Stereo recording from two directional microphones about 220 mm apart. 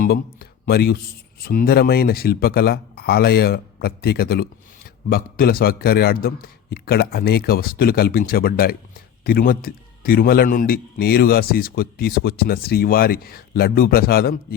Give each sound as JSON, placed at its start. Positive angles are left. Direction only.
{"t": 0.0, "sound": "a man's voice", "side_deg": 40}